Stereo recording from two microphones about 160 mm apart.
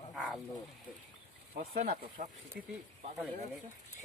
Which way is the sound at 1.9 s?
75° right (ahead or behind).